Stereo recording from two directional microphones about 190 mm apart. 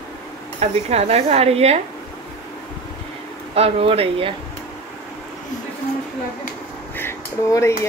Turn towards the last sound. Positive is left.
turn(degrees=15)  # may be behind; listen again after turning